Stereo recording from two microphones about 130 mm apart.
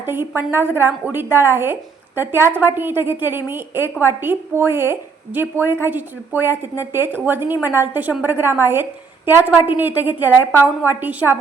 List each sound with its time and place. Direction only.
0.0 s speech: 15° right (ahead or behind)